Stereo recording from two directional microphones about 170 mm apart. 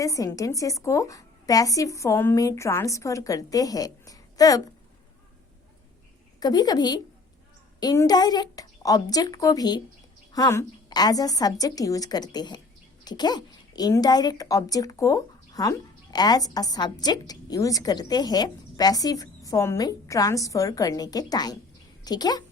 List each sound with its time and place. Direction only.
0.0 s a woman's voice: 20° left (ahead or behind)
6.4 s a woman's voice: 20° left (ahead or behind)